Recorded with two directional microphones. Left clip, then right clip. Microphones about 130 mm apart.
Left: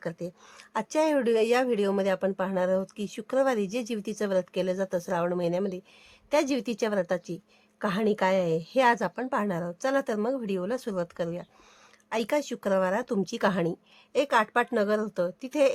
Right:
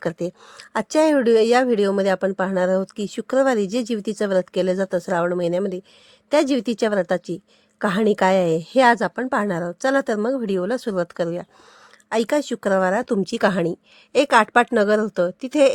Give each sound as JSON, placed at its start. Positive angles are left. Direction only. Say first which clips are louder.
{"t": 0.0, "sound": "speech", "louder": "right 10 dB", "side_deg": -65}
{"t": 0.5, "sound": "a woman's voice", "louder": "right 7 dB", "side_deg": -45}
{"t": 14.2, "sound": "speech", "louder": "right 9 dB", "side_deg": -55}